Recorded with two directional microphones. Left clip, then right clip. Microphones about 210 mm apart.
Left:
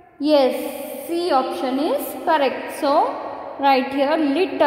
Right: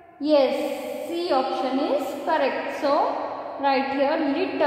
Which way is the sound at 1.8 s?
55° left (ahead or behind).